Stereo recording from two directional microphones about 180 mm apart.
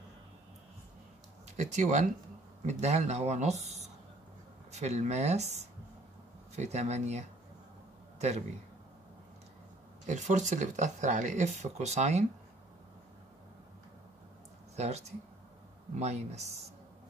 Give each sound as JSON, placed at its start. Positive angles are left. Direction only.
{"t": 1.6, "sound": "speech", "side_deg": -40}
{"t": 10.0, "sound": "speech", "side_deg": -40}
{"t": 14.8, "sound": "speech", "side_deg": -35}